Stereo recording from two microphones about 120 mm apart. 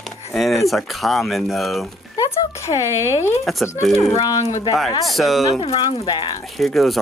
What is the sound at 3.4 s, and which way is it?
Speech, centre (ahead or behind).